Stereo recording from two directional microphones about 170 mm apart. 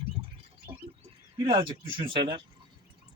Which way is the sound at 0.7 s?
30° right (ahead or behind).